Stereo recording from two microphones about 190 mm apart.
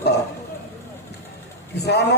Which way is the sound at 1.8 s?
60° left (ahead or behind).